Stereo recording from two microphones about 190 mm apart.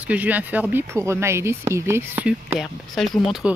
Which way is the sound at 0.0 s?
10° right (ahead or behind).